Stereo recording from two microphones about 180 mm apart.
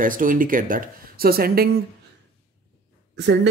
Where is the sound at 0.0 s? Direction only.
50° right (ahead or behind).